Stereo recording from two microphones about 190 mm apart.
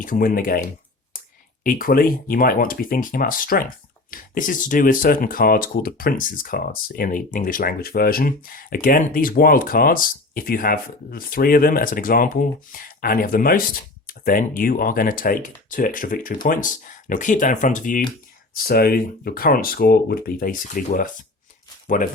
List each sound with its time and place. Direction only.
0.0 s speech: 45° left (ahead or behind)